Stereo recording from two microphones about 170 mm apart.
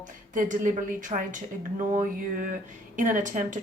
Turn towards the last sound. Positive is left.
turn(degrees=-50)  # may be behind; listen again after turning